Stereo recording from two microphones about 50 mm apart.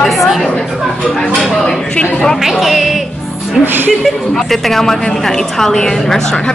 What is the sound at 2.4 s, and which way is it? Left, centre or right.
Music, centre.